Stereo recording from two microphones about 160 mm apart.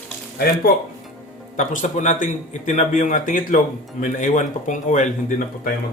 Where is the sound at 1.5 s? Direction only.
50° left (ahead or behind).